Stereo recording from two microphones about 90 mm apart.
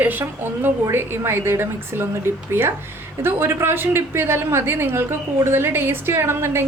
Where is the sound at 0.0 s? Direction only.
20° right (ahead or behind).